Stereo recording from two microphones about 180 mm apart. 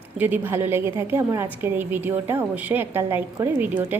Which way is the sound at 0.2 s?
10° right (ahead or behind).